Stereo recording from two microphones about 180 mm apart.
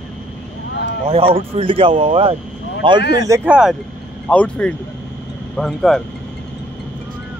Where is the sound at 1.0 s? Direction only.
30° right (ahead or behind).